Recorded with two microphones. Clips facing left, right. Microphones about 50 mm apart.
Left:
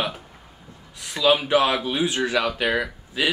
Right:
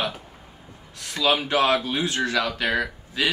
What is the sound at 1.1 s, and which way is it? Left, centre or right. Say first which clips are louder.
Speech: left 3 dB; centre.